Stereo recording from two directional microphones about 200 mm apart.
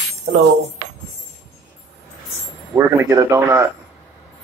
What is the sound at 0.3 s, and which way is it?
Speech, 55° right (ahead or behind).